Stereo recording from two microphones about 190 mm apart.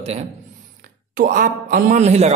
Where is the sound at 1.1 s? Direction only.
45° right (ahead or behind).